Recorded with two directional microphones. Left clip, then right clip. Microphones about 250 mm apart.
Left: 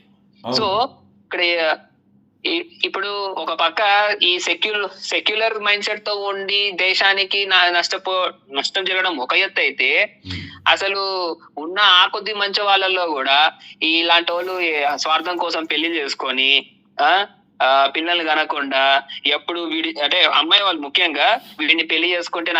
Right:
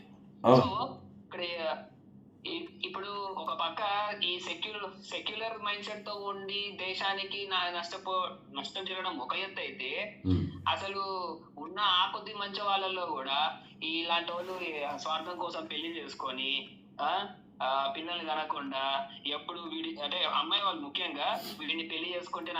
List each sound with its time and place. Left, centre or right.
0.5 s speech: left